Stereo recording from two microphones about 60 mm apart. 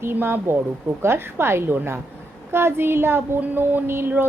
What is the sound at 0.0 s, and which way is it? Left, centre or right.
A woman's voice, right.